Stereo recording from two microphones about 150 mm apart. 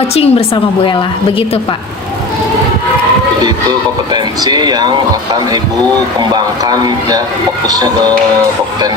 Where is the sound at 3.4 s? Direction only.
30° right (ahead or behind).